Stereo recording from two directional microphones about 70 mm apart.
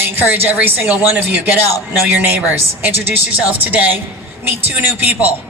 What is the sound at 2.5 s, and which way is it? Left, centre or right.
A woman's voice, right.